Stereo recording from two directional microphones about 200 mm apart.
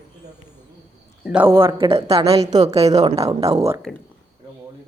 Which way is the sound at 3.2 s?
15° right (ahead or behind).